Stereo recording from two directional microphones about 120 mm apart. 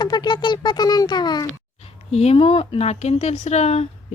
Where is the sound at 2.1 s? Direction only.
60° left (ahead or behind).